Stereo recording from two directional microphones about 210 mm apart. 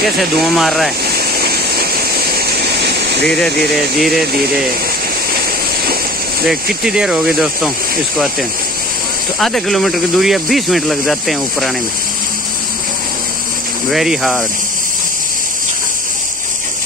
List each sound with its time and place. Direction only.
0.0 s speech: centre (ahead or behind)
1.4 s waterfall: 45° right (ahead or behind)
3.3 s speech: centre (ahead or behind)
6.4 s speech: centre (ahead or behind)
9.4 s speech: centre (ahead or behind)
13.8 s speech: centre (ahead or behind)